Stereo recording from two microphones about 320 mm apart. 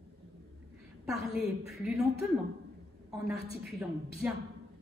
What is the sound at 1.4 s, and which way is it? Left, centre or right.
Speech, centre.